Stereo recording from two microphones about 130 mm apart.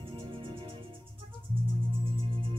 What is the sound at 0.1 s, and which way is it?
Music, 40° right (ahead or behind).